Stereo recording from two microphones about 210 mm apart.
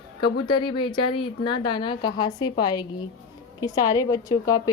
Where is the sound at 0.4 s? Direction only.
20° left (ahead or behind).